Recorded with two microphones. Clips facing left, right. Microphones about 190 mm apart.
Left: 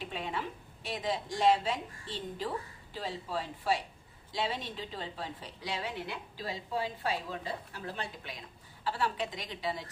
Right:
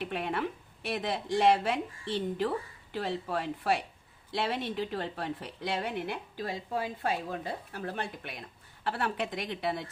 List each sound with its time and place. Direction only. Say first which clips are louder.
0.0 s a woman's voice: right 5 dB; 60° right (ahead or behind)